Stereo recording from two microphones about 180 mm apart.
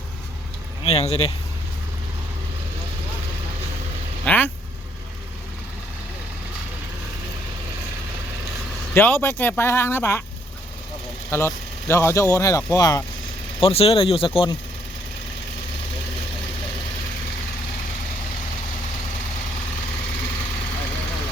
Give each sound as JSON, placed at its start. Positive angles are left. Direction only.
{"t": 0.9, "sound": "speech", "side_deg": 35}
{"t": 4.3, "sound": "speech", "side_deg": 10}
{"t": 9.0, "sound": "speech", "side_deg": 15}
{"t": 11.3, "sound": "speech", "side_deg": 15}
{"t": 13.6, "sound": "speech", "side_deg": 30}